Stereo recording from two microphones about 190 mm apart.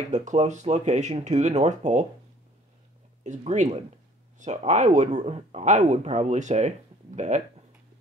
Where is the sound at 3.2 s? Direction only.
40° right (ahead or behind).